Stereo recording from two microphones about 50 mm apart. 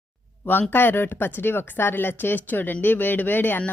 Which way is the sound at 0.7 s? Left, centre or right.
Left.